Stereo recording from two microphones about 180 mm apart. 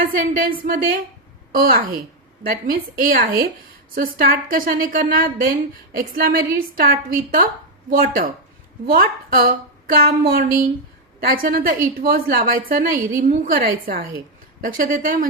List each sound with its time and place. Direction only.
0.0 s a woman's voice: 50° right (ahead or behind)